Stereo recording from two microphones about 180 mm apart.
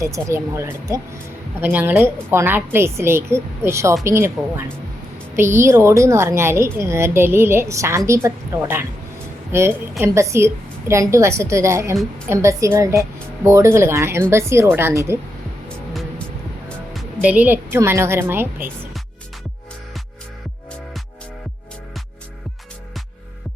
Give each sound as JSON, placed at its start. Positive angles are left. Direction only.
{"t": 0.0, "sound": "a woman's voice", "side_deg": -15}
{"t": 15.9, "sound": "music", "side_deg": 0}
{"t": 17.2, "sound": "a woman's voice", "side_deg": -10}